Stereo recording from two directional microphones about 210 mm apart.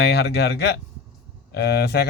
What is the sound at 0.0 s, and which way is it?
Speech, 50° left (ahead or behind).